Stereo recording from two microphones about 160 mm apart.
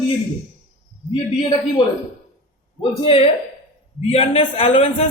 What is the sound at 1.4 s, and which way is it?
Speech, 30° left (ahead or behind).